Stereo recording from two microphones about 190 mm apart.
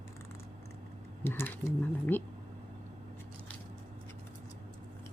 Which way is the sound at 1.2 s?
10° left (ahead or behind).